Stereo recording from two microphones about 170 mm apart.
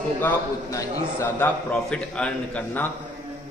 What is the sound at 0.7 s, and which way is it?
A man's voice, 15° left (ahead or behind).